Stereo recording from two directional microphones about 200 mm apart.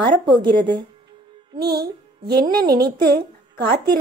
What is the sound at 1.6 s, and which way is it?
A child's voice, 50° right (ahead or behind).